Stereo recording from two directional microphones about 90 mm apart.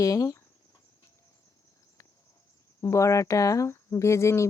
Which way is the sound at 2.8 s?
35° left (ahead or behind).